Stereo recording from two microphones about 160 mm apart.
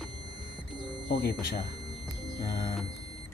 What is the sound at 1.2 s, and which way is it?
Speech, 80° left.